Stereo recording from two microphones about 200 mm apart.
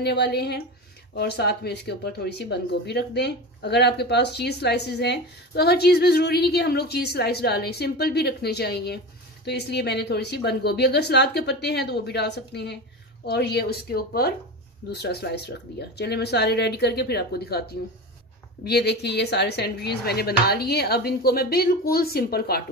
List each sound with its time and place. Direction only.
0.0 s a woman's voice: 55° left (ahead or behind)